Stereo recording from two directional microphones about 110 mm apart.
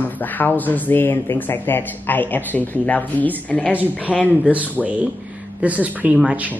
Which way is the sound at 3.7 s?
15° right (ahead or behind).